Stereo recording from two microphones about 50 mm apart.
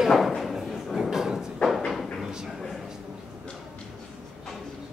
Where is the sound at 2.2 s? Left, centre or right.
Centre.